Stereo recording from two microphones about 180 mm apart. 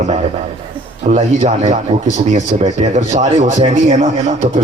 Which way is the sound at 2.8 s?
40° right (ahead or behind).